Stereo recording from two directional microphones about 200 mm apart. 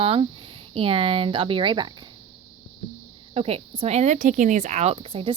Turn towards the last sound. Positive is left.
turn(degrees=-30)  # may be behind; listen again after turning